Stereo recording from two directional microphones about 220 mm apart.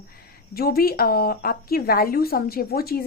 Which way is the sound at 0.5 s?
45° left (ahead or behind).